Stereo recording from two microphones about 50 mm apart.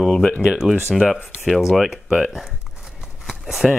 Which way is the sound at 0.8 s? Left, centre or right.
Centre.